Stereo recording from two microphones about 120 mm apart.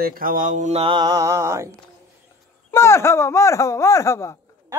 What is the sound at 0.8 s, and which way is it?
Mantra, 40° right (ahead or behind).